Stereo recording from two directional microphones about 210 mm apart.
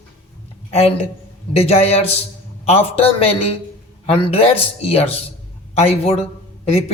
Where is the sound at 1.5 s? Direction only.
30° left (ahead or behind).